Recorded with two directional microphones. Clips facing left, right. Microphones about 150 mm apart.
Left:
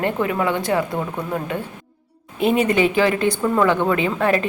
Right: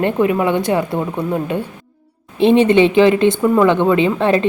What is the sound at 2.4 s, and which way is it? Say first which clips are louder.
Speech: right 6 dB; 25° right (ahead or behind).